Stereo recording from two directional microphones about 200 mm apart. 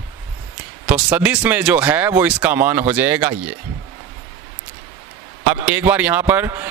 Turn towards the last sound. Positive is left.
turn(degrees=-10)  # may be behind; listen again after turning